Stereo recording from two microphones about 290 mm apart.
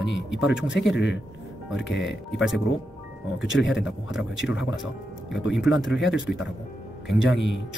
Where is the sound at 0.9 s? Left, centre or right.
Left.